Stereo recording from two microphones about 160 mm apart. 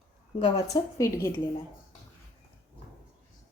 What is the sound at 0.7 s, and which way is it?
Speech, 20° left (ahead or behind).